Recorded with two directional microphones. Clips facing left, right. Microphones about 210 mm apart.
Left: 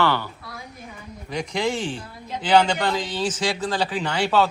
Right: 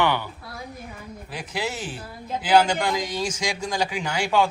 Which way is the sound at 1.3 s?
5° right (ahead or behind).